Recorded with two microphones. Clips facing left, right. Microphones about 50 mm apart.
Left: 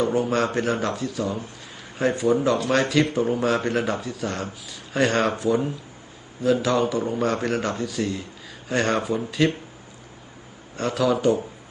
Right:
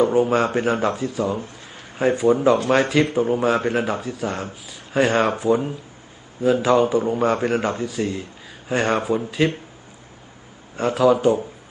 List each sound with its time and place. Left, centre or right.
0.0 s speech: centre
6.4 s speech: centre
10.8 s speech: centre